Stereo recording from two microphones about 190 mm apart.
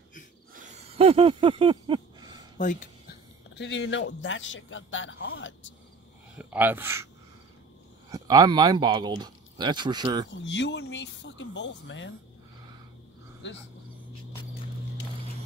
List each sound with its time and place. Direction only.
0.6 s a sound: 35° right (ahead or behind)
2.5 s a sound: 45° left (ahead or behind)
3.5 s speech: 70° left (ahead or behind)
6.3 s speech: 10° right (ahead or behind)
8.1 s speech: 20° right (ahead or behind)
10.3 s speech: 70° left (ahead or behind)
13.4 s speech: 70° left (ahead or behind)